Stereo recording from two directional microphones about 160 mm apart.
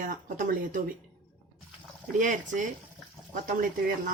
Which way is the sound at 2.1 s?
50° right (ahead or behind).